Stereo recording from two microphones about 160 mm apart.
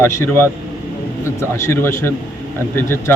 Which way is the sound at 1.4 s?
15° left (ahead or behind).